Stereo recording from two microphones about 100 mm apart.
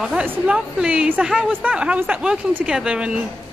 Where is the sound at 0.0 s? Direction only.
5° right (ahead or behind).